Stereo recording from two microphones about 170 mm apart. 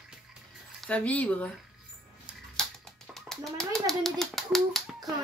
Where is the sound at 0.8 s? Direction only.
5° left (ahead or behind).